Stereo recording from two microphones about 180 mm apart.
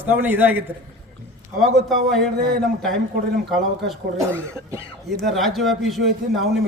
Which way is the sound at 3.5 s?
Centre (ahead or behind).